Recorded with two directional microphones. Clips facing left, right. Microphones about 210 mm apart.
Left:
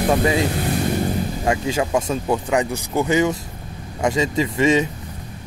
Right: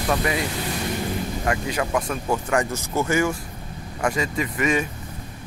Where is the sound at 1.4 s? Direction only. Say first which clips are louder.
Left 5 dB; 20° left (ahead or behind).